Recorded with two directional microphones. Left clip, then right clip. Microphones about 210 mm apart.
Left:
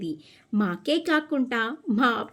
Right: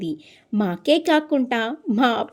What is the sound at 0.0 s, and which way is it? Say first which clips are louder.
A woman's voice: right 4 dB; 25° right (ahead or behind).